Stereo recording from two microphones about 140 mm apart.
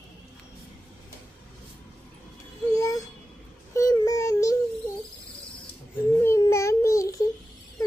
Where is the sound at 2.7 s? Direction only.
25° left (ahead or behind).